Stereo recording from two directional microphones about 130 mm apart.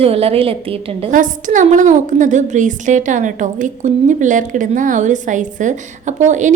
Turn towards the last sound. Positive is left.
turn(degrees=-70)  # may be behind; listen again after turning